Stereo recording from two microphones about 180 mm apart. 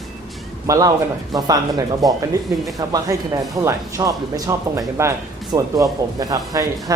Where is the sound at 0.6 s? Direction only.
20° right (ahead or behind).